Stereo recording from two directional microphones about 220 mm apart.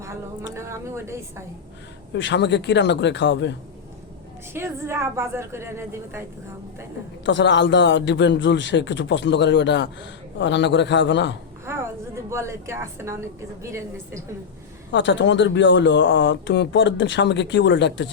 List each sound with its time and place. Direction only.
0.5 s a woman's voice: 10° right (ahead or behind)
2.1 s a man's voice: 55° left (ahead or behind)
4.5 s a woman's voice: 10° right (ahead or behind)
7.3 s a man's voice: 55° left (ahead or behind)
11.6 s a woman's voice: 10° right (ahead or behind)
14.9 s speech: 55° left (ahead or behind)